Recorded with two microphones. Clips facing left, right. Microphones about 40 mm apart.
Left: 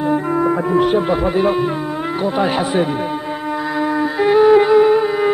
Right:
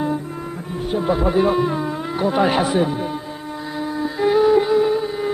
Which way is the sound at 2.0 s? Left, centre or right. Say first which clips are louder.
Left 3 dB; left.